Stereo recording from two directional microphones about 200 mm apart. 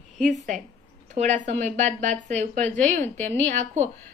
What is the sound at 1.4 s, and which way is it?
A woman's voice, 35° right (ahead or behind).